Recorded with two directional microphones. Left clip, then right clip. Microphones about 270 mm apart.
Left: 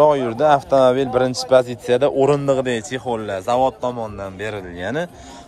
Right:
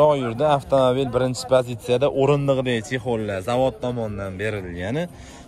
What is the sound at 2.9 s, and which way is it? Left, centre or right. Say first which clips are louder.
Speech: left 2 dB; centre.